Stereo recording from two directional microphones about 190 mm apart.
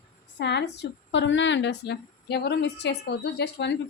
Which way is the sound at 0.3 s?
65° left (ahead or behind).